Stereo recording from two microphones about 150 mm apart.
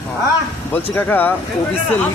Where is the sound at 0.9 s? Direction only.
10° left (ahead or behind).